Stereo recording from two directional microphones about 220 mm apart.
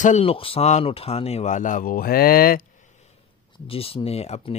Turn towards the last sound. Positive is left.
turn(degrees=30)  # may be behind; listen again after turning